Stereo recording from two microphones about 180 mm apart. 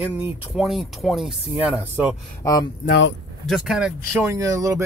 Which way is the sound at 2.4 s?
20° left (ahead or behind).